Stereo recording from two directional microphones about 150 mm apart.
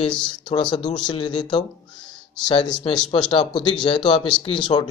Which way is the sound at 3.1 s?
35° left (ahead or behind).